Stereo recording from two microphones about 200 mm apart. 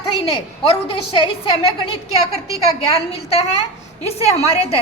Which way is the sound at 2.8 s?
30° left (ahead or behind).